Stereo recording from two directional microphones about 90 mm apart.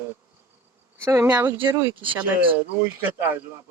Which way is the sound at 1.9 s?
70° right (ahead or behind).